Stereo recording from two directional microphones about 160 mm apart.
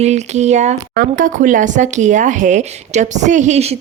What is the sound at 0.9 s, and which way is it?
Speech, 60° right (ahead or behind).